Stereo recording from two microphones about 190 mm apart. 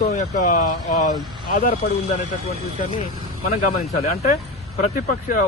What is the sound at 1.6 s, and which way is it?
Speech, 40° left (ahead or behind).